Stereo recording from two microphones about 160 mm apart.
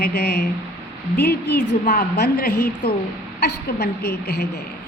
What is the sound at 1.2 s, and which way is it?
Speech, 10° left (ahead or behind).